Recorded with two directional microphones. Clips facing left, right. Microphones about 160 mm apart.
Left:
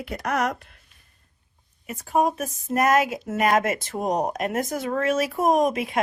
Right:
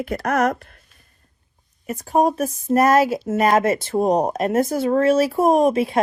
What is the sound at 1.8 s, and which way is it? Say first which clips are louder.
A woman's voice: right 4 dB; 40° right (ahead or behind).